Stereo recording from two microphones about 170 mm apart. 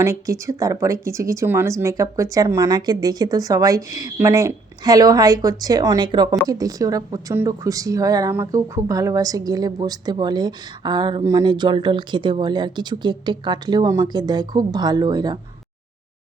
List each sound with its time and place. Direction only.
0.0 s a woman's voice: 15° right (ahead or behind)